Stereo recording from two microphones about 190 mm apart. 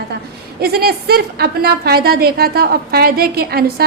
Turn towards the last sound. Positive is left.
turn(degrees=-55)  # may be behind; listen again after turning